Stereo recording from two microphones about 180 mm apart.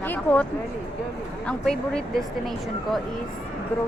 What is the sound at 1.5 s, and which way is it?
Speech, 5° left (ahead or behind).